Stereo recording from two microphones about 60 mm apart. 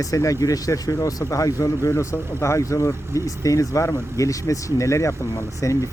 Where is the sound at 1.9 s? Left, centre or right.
Left.